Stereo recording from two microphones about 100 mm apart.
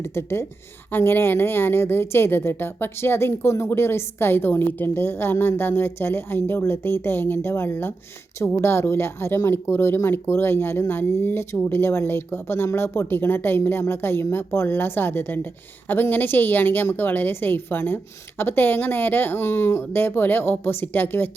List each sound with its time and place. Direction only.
0.0 s a woman's voice: 25° left (ahead or behind)